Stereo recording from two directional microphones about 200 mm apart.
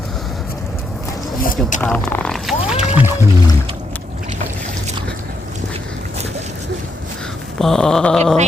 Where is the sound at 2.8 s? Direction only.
10° right (ahead or behind).